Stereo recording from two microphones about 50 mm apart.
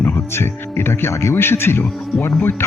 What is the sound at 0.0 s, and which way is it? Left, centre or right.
Speech, left.